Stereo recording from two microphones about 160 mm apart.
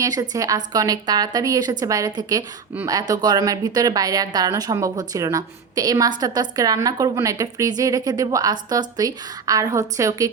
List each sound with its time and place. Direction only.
0.0 s speech: 20° right (ahead or behind)